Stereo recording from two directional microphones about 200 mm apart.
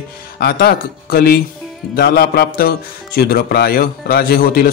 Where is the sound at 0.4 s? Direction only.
50° left (ahead or behind).